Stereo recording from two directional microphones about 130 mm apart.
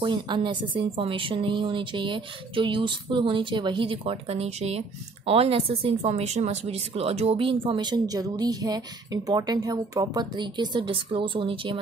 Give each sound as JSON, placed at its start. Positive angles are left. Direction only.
{"t": 0.0, "sound": "speech", "side_deg": -40}